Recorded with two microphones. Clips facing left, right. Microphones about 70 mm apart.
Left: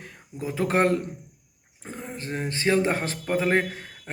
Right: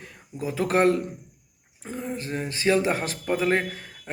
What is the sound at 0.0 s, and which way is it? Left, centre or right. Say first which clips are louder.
A man's voice: right 1 dB; left.